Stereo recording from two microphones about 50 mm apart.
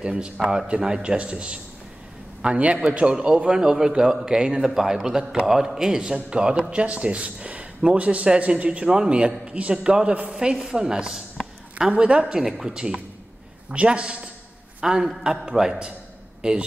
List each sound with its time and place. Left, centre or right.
0.0 s a man's voice: centre
11.9 s speech: right
12.4 s a man's voice: centre
12.7 s a man's voice: centre